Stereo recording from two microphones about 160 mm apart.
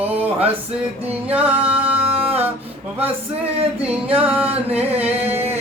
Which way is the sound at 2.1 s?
35° right (ahead or behind).